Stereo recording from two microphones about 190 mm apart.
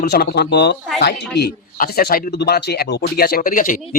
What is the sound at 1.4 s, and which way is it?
Speech, 50° left (ahead or behind).